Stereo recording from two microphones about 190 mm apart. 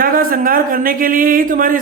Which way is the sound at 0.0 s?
50° right (ahead or behind).